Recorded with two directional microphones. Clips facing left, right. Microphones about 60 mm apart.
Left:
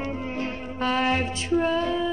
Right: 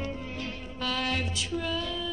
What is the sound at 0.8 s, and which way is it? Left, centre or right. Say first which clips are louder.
Music: left 7 dB; left.